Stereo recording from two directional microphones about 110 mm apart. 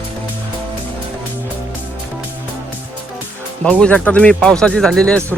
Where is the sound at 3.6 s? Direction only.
10° left (ahead or behind).